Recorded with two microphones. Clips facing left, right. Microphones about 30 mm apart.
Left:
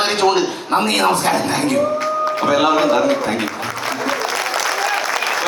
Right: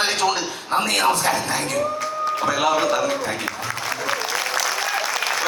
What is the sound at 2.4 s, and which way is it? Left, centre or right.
Speech, left.